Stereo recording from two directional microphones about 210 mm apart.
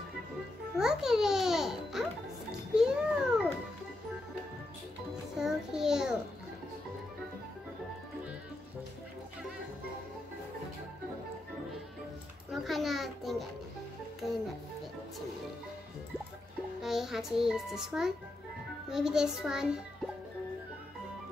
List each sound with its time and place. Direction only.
0.7 s a child's voice: 5° right (ahead or behind)
2.7 s babbling: 5° right (ahead or behind)
5.4 s child singing: 5° right (ahead or behind)
12.4 s a child's voice: centre (ahead or behind)
16.8 s a child's voice: centre (ahead or behind)